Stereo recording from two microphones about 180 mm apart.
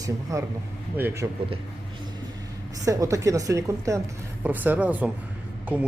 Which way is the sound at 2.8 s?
20° right (ahead or behind).